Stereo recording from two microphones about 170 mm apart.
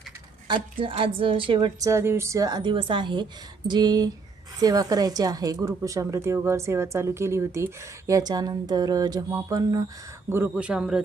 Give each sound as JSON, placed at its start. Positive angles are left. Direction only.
{"t": 0.4, "sound": "speech", "side_deg": -30}
{"t": 1.9, "sound": "speech", "side_deg": -15}